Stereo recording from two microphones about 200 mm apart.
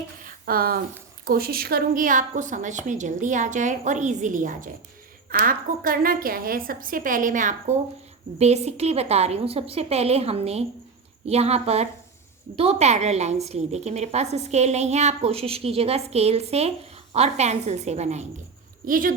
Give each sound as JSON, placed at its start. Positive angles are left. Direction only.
{"t": 0.3, "sound": "a sound", "side_deg": -45}
{"t": 1.2, "sound": "a woman's voice", "side_deg": -50}
{"t": 18.9, "sound": "a woman's voice", "side_deg": -45}